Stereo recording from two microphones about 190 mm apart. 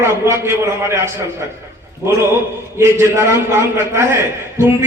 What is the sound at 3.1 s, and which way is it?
A man's voice, 15° right (ahead or behind).